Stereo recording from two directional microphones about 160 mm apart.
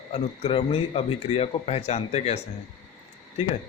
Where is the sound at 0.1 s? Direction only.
40° left (ahead or behind).